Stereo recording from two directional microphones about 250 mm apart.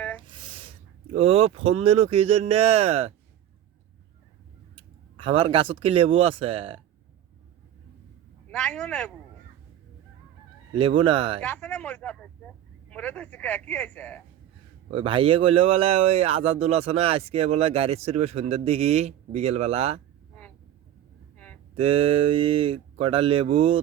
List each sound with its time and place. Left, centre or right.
0.3 s speech: right
4.8 s speech: right
8.4 s speech: centre
10.7 s speech: right
11.4 s speech: centre
14.8 s speech: right
21.3 s a sound: centre
21.8 s speech: right